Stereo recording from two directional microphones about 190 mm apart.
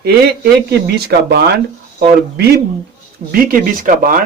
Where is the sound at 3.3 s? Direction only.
50° right (ahead or behind).